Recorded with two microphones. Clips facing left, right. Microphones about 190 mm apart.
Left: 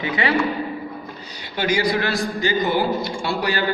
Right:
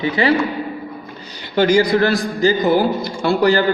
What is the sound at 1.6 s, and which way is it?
Speech, 45° right (ahead or behind).